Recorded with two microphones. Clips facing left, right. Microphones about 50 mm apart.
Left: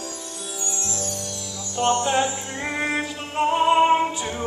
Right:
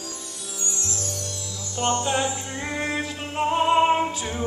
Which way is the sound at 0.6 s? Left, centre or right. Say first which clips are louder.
Left 1 dB; left.